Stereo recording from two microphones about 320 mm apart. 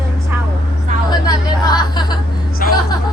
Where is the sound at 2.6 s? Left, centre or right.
Left.